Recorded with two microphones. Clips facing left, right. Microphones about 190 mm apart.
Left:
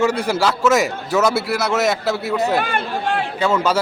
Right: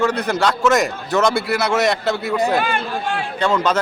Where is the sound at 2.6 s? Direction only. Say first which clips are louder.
Even; 55° left (ahead or behind).